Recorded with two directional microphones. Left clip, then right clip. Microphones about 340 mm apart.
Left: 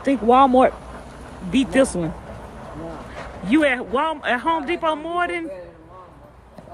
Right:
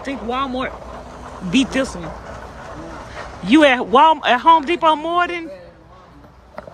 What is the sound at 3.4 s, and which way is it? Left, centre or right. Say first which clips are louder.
Speech: right 6 dB; centre.